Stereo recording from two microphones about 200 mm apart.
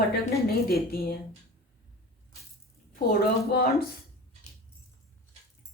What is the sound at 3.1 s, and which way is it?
Speech, 50° left (ahead or behind).